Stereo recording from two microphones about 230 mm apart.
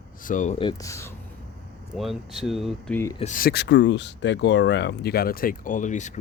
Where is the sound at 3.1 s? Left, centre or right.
Left.